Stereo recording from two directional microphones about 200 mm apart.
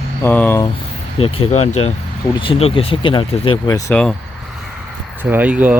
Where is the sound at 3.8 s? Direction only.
5° left (ahead or behind).